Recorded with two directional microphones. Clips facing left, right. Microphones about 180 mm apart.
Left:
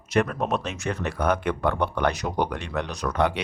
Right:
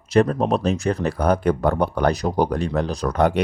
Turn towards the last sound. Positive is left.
turn(degrees=-45)  # may be behind; listen again after turning